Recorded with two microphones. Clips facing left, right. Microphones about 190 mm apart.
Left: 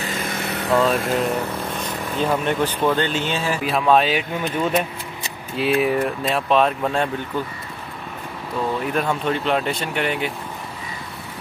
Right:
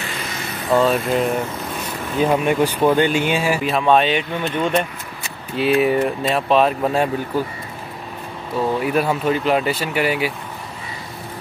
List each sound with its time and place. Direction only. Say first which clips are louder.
0.3 s vehicle: left 3 dB; 65° left (ahead or behind)
0.7 s speech: right 3 dB; centre (ahead or behind)
3.6 s speech: even; centre (ahead or behind)
8.7 s speech: right 4 dB; 5° right (ahead or behind)